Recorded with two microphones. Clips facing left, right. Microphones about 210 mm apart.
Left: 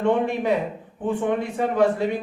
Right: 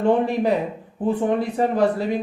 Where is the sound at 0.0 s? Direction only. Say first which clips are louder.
Right 2 dB; 35° right (ahead or behind).